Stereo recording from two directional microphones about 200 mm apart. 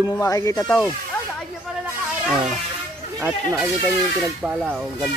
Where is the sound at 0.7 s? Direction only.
5° left (ahead or behind).